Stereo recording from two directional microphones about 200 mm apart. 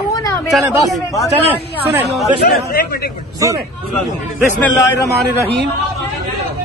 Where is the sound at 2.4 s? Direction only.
45° left (ahead or behind).